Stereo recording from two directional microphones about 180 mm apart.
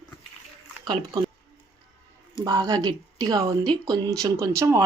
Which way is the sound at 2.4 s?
25° right (ahead or behind).